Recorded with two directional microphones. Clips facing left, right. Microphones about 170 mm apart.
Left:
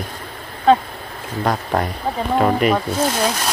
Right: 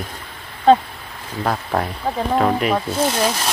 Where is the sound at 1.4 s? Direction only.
Centre (ahead or behind).